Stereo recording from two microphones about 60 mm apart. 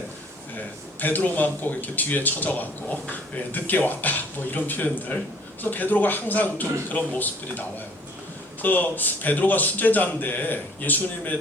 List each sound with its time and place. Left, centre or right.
0.5 s speech: left
8.6 s speech: left